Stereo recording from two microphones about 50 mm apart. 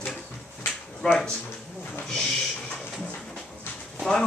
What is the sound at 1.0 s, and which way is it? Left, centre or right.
Speech, left.